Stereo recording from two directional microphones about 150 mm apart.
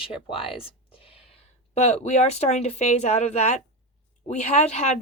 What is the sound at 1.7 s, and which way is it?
A woman's voice, 45° left (ahead or behind).